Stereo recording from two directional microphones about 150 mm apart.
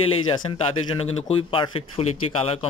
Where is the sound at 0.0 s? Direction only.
35° left (ahead or behind).